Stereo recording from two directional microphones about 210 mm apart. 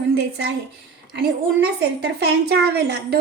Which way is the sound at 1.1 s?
50° right (ahead or behind).